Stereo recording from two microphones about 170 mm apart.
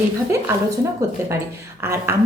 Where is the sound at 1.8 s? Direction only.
15° right (ahead or behind).